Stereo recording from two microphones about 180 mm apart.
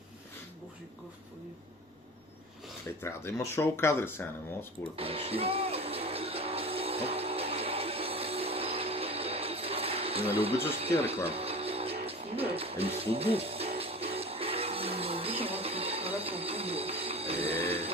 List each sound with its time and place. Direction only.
3.0 s speech: 15° left (ahead or behind)
4.9 s music: 30° right (ahead or behind)